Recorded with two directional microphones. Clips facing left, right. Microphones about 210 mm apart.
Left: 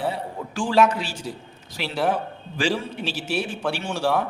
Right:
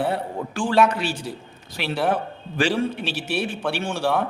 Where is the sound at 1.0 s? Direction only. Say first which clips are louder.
Right 5 dB; 60° right (ahead or behind).